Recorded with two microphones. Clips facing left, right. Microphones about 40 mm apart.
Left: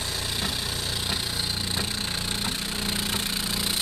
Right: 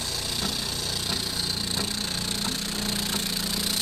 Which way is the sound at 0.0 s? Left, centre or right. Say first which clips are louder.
Left 1 dB; centre.